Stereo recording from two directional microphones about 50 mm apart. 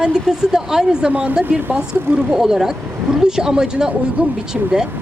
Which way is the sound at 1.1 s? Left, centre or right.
Right.